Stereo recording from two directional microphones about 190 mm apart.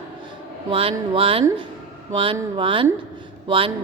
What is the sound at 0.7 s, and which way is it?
A woman's voice, 30° right (ahead or behind).